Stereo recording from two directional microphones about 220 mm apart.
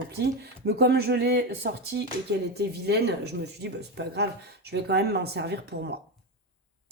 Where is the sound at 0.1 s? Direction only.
45° right (ahead or behind).